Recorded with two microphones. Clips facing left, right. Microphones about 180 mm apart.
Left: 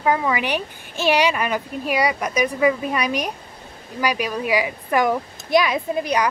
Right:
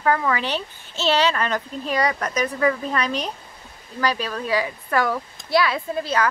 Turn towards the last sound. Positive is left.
turn(degrees=15)  # may be behind; listen again after turning